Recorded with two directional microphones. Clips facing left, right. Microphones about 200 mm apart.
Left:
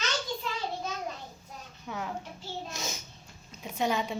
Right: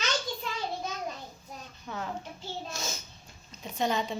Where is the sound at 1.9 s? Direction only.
15° left (ahead or behind).